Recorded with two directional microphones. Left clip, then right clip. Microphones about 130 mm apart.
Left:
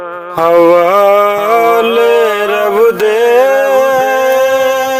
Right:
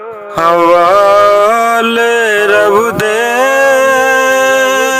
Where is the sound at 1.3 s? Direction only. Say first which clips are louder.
Right 1 dB; 35° right (ahead or behind).